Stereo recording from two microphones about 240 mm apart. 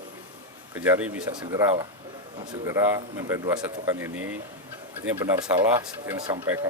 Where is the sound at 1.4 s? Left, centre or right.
Centre.